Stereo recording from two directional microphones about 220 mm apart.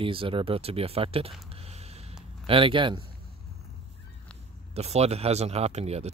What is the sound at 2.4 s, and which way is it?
Speech, 25° right (ahead or behind).